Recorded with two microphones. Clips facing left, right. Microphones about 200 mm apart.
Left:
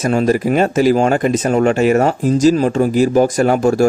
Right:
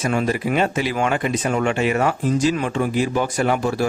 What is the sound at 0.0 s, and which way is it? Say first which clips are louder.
Speech: left 7 dB; 40° left (ahead or behind).